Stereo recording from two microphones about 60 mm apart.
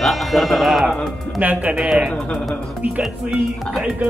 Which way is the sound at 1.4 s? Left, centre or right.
Right.